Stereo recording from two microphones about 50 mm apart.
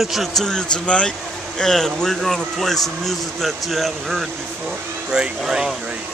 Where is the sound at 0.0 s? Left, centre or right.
Centre; by 1.1 s left.